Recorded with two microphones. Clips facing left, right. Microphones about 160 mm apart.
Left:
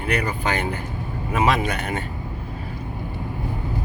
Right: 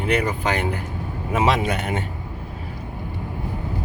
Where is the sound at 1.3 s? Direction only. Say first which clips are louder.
Right 1 dB; 20° right (ahead or behind).